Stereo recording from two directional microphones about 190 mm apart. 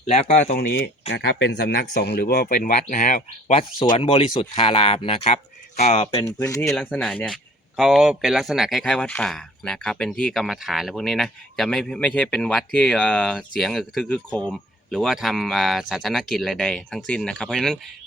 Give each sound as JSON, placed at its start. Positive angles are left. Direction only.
{"t": 0.1, "sound": "speech", "side_deg": 40}
{"t": 1.1, "sound": "speech", "side_deg": 65}
{"t": 3.8, "sound": "speech", "side_deg": 30}
{"t": 6.1, "sound": "speech", "side_deg": 15}